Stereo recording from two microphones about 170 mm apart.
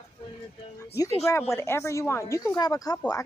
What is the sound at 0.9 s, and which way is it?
Speech, 15° left (ahead or behind).